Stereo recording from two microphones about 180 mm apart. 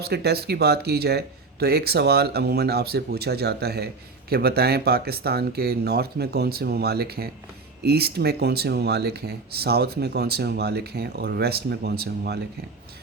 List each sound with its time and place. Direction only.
0.0 s speech: 65° right (ahead or behind)